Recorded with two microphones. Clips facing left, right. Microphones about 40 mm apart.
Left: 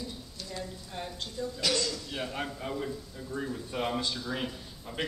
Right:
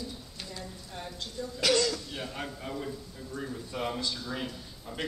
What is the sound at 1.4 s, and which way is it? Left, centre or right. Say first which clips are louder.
Speech: right 4 dB; centre.